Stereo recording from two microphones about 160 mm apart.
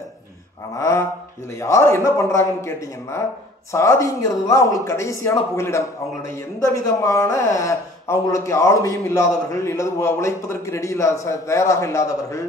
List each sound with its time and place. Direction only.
0.7 s a man's voice: 20° left (ahead or behind)